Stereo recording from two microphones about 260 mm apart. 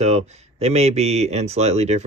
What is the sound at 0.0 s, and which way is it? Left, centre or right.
Speech, right.